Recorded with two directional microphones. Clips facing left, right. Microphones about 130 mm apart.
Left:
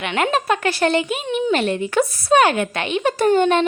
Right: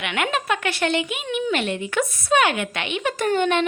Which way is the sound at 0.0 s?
35° left (ahead or behind).